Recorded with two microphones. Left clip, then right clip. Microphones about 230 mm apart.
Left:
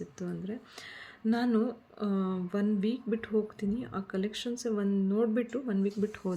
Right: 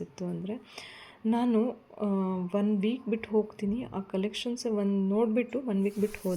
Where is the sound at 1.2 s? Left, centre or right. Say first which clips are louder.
Right 2 dB; centre.